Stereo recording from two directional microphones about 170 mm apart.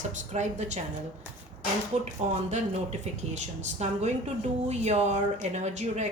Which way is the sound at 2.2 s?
40° right (ahead or behind).